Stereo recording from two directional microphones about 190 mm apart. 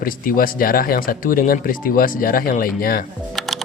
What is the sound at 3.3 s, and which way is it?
Music, centre (ahead or behind).